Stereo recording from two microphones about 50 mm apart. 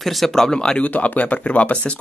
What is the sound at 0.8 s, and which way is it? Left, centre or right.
Speech, left.